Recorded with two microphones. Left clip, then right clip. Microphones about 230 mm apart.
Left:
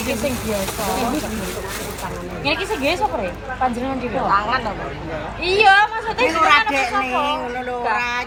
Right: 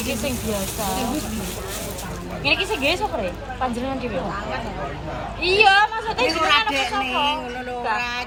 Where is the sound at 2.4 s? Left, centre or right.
Centre.